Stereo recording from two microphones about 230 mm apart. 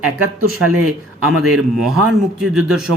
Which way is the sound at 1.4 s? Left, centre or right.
Centre.